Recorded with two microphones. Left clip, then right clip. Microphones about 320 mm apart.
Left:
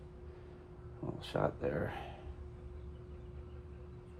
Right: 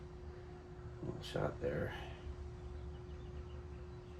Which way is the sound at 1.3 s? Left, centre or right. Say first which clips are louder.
Left 5 dB; centre.